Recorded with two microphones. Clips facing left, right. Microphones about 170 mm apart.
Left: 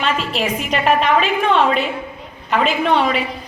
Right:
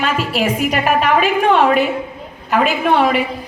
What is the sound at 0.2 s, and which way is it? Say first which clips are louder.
A woman's voice: right 4 dB; 10° right (ahead or behind).